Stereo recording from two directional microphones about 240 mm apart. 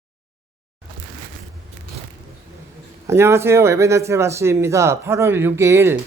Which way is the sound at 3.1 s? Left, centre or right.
Centre.